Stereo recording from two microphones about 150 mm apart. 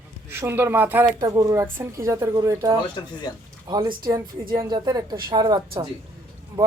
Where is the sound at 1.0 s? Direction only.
25° right (ahead or behind).